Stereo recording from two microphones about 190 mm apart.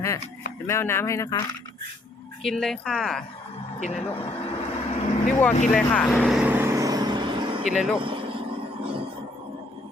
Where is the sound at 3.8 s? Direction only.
35° left (ahead or behind).